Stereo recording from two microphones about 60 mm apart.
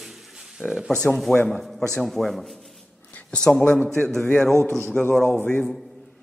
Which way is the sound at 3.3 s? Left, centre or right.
Centre.